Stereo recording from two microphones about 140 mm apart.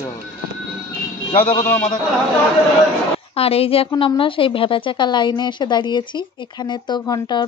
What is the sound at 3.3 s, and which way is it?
A woman's voice, 45° left (ahead or behind).